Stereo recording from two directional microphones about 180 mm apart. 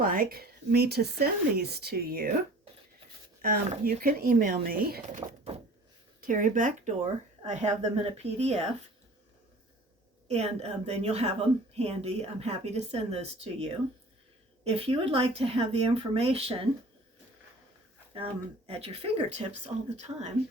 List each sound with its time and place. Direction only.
0.0 s speech: 50° right (ahead or behind)
3.4 s speech: 55° right (ahead or behind)
6.2 s a woman's voice: 50° right (ahead or behind)
10.2 s a woman's voice: 35° right (ahead or behind)
18.1 s a woman's voice: 35° right (ahead or behind)